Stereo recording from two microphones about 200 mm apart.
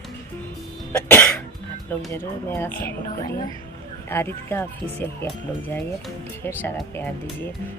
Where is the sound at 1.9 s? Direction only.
10° left (ahead or behind).